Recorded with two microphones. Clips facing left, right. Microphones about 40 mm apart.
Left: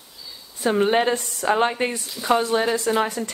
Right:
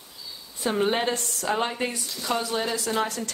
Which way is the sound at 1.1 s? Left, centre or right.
Left.